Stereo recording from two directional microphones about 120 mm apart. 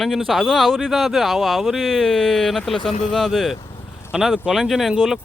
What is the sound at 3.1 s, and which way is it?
Speech, centre (ahead or behind).